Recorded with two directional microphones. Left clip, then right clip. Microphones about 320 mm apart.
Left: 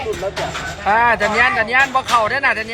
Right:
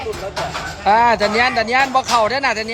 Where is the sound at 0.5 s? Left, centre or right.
Centre.